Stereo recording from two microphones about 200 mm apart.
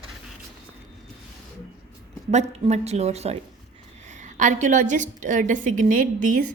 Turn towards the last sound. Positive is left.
turn(degrees=-40)  # may be behind; listen again after turning